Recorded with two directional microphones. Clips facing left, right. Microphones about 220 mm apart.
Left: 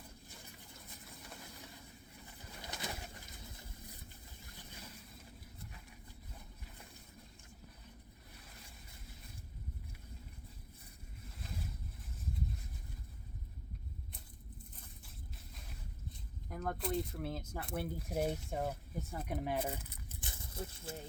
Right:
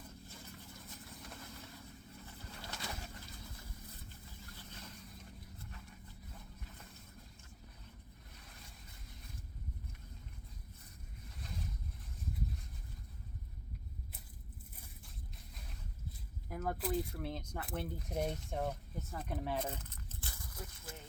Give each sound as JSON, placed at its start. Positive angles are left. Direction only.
{"t": 2.2, "sound": "pigeon", "side_deg": 15}
{"t": 4.5, "sound": "boat", "side_deg": 10}
{"t": 16.5, "sound": "speech", "side_deg": -5}
{"t": 20.3, "sound": "speech", "side_deg": 25}